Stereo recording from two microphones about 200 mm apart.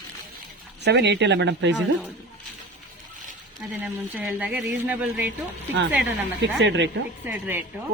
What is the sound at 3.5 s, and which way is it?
Speech, 5° right (ahead or behind).